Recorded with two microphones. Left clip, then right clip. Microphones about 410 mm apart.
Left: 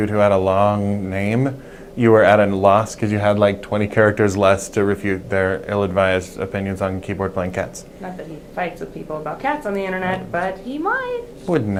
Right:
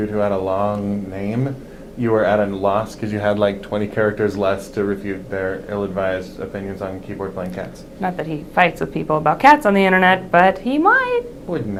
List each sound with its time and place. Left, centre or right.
0.1 s speech: left
8.0 s speech: right
11.5 s speech: left